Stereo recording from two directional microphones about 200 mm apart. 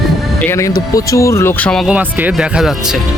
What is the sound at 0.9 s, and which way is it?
Speech, 15° left (ahead or behind).